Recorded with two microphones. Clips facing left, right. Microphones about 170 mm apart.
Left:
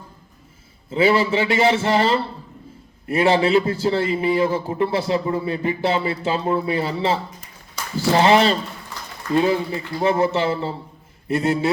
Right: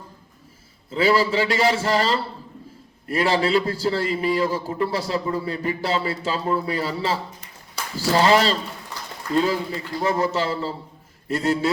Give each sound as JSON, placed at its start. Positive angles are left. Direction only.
{"t": 0.9, "sound": "a man's voice", "side_deg": 25}